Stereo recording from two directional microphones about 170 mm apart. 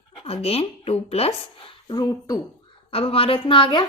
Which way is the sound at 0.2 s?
35° left (ahead or behind).